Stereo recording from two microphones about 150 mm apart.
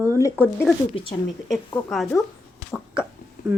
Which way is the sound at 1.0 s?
35° left (ahead or behind).